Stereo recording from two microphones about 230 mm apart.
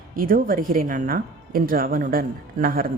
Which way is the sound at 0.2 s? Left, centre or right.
Right.